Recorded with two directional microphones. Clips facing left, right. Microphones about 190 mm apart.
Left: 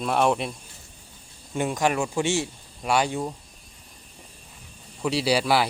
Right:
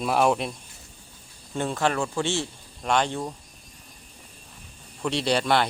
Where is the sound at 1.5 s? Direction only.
10° left (ahead or behind).